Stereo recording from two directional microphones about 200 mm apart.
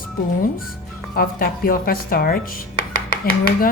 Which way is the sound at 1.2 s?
45° left (ahead or behind).